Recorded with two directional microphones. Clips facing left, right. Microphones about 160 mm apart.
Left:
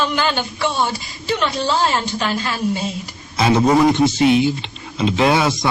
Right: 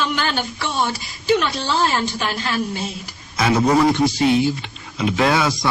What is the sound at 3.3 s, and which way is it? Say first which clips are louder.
A man's voice: left 2 dB; 25° left (ahead or behind).